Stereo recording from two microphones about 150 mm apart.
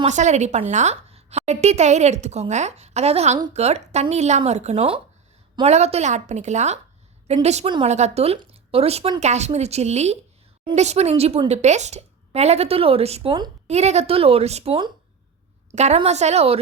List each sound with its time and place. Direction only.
0.0 s a woman's voice: 50° right (ahead or behind); by 14.9 s 35° right (ahead or behind)
15.7 s a woman's voice: 50° right (ahead or behind)